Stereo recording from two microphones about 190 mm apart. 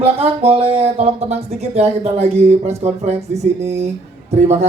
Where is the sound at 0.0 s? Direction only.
30° right (ahead or behind).